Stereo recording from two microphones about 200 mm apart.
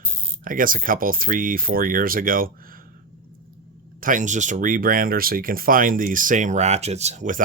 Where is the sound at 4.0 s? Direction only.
40° right (ahead or behind).